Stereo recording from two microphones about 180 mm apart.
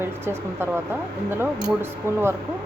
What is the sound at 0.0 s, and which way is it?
Speech, 15° right (ahead or behind).